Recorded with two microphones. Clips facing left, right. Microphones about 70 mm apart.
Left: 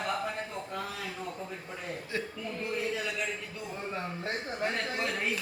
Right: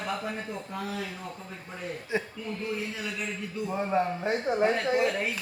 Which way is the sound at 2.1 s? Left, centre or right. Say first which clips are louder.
Right 5 dB; centre.